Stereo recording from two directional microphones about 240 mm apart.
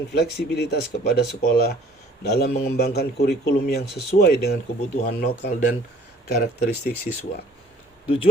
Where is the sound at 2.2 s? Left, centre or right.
Left.